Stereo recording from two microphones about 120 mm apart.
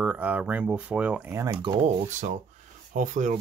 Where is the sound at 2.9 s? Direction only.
90° right.